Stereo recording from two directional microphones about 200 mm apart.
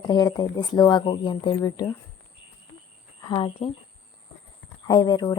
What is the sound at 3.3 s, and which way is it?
Speech, 25° left (ahead or behind).